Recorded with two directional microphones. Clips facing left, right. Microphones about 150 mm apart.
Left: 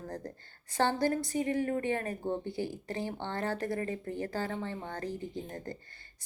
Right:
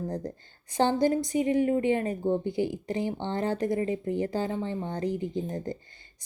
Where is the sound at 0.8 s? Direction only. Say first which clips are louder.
Right 5 dB; 15° right (ahead or behind).